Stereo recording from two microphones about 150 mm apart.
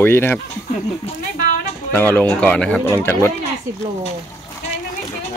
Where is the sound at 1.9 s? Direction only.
10° left (ahead or behind).